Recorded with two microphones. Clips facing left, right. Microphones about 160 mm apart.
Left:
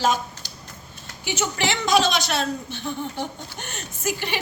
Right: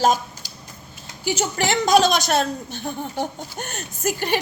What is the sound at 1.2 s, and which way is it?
A woman's voice, 40° right (ahead or behind).